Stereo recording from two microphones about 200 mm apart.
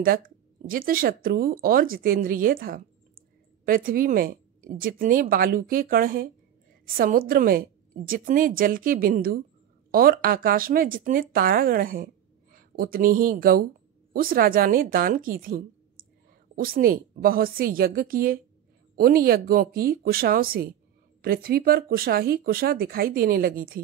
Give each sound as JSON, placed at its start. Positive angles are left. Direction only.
{"t": 0.7, "sound": "a woman's voice", "side_deg": -45}
{"t": 16.6, "sound": "a woman's voice", "side_deg": -45}